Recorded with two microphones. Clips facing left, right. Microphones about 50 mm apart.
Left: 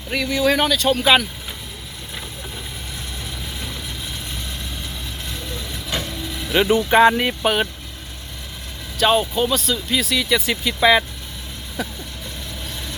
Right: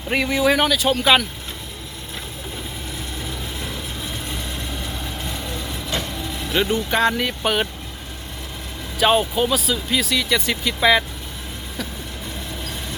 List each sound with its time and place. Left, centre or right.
0.1 s speech: right
0.5 s speech: centre
6.5 s speech: centre
7.4 s speech: centre
9.0 s speech: centre